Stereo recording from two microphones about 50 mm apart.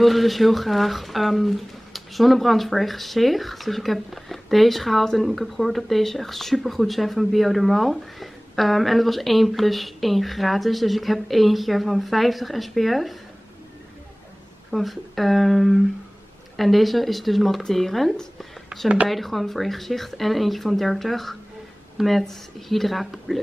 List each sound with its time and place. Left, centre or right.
0.0 s speech: centre
14.7 s speech: centre
18.7 s speech: centre
19.0 s speech: centre